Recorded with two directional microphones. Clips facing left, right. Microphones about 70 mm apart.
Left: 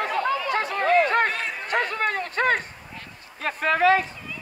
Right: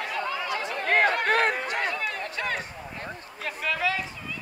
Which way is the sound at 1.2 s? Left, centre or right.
Right.